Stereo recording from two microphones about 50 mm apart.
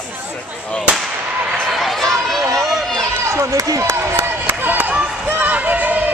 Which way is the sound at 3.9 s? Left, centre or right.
Right.